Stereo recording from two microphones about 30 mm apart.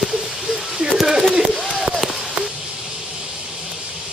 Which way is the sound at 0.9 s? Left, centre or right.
Centre.